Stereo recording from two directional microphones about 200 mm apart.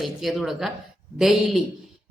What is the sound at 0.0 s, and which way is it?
A woman's voice, centre (ahead or behind).